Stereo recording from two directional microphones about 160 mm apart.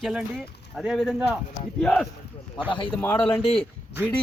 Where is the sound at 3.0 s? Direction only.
10° left (ahead or behind).